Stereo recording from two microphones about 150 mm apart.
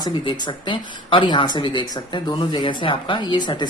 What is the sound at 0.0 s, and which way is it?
Speech, 30° left (ahead or behind).